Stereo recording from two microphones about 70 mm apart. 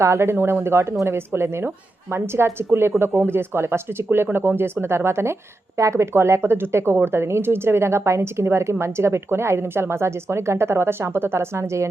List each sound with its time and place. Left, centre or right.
0.0 s speech: right